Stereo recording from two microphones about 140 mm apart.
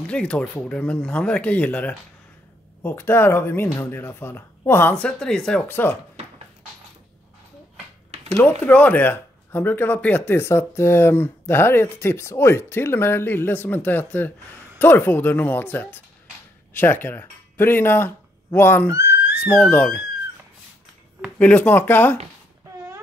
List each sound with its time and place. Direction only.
0.0 s speech: 10° left (ahead or behind)
8.3 s speech: 10° left (ahead or behind)
21.4 s speech: 10° left (ahead or behind)